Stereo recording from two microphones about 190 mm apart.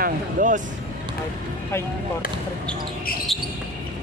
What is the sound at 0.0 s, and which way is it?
Speech, 45° right (ahead or behind).